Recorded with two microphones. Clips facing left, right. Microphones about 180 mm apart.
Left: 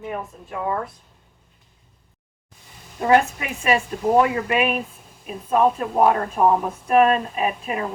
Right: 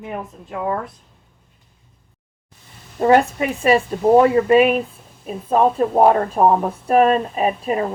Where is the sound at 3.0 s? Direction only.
35° right (ahead or behind).